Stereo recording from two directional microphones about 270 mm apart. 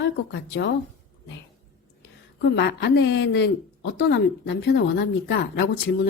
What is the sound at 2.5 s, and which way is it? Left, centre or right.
Speech, left.